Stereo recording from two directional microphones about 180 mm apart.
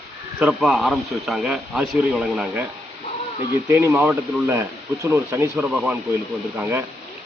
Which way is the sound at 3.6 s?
10° right (ahead or behind).